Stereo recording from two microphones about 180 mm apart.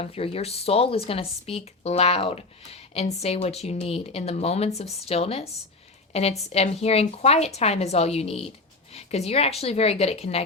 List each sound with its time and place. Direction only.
0.0 s speech: 35° left (ahead or behind)